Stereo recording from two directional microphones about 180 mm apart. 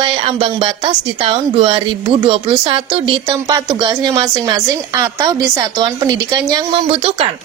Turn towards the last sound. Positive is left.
turn(degrees=-30)  # may be behind; listen again after turning